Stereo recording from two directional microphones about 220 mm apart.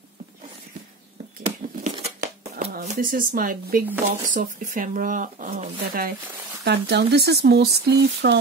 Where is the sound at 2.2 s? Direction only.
45° right (ahead or behind).